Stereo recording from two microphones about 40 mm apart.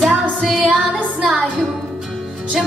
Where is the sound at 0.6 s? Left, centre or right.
Right.